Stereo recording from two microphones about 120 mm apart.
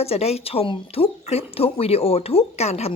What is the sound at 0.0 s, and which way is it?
A woman's voice, 60° left (ahead or behind).